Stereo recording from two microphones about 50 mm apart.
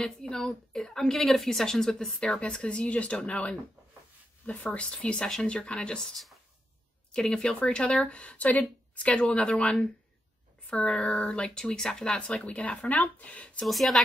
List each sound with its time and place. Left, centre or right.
0.0 s a woman's voice: centre; by 13.7 s left
13.7 s a woman's voice: centre